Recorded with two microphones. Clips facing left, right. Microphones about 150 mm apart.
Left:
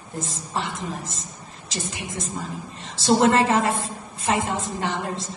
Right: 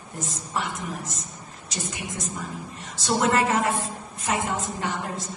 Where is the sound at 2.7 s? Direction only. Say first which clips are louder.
Left 6 dB; 30° left (ahead or behind).